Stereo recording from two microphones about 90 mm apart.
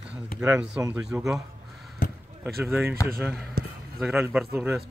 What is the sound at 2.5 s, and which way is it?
Speech, centre (ahead or behind).